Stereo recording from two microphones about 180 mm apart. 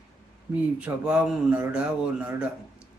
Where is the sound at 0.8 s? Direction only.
5° right (ahead or behind).